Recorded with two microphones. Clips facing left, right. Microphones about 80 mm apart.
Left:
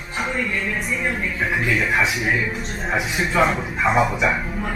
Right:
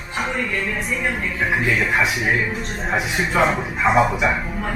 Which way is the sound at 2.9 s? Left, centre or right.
Centre.